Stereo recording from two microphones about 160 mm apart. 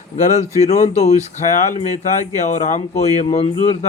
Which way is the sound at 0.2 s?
45° left (ahead or behind).